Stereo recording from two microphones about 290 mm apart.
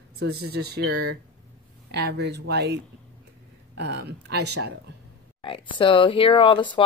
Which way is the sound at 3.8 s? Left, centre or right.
Right.